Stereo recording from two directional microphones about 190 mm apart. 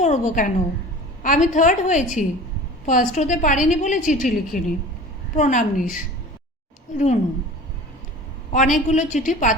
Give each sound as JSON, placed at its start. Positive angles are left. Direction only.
{"t": 0.0, "sound": "a woman's voice", "side_deg": 40}
{"t": 8.5, "sound": "a woman's voice", "side_deg": 40}